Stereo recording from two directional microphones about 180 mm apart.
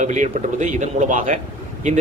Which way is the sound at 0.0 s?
40° right (ahead or behind).